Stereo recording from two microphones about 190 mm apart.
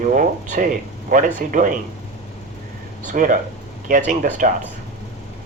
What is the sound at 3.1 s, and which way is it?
Speech, 45° right (ahead or behind).